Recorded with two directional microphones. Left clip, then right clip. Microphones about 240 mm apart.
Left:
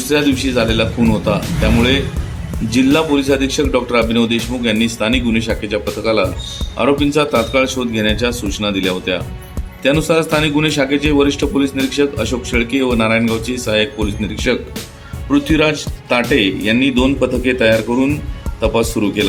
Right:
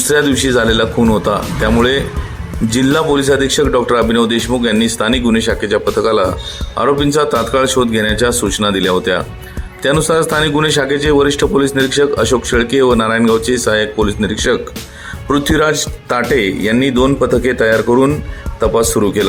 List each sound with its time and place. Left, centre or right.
0.1 s a man's voice: right